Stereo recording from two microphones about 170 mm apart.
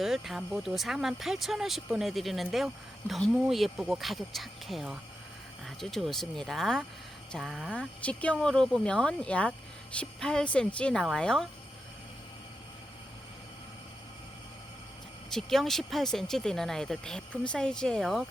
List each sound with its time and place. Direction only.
0.0 s speech: centre (ahead or behind)
15.3 s speech: centre (ahead or behind)